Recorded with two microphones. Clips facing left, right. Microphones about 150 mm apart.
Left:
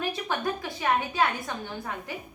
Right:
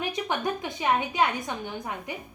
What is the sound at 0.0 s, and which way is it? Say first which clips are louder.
A woman's voice: right 1 dB; 20° right (ahead or behind).